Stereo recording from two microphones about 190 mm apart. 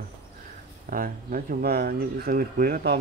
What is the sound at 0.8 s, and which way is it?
Speech, 50° right (ahead or behind).